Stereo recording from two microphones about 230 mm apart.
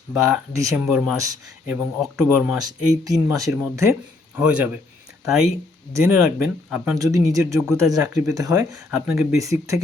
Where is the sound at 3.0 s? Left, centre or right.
Centre.